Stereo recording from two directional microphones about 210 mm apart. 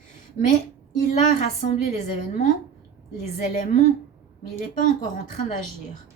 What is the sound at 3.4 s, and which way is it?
A woman's voice, 40° left (ahead or behind).